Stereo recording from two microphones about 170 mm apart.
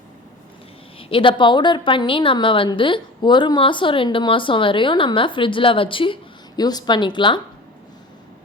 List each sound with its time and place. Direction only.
0.9 s a woman's voice: 30° left (ahead or behind)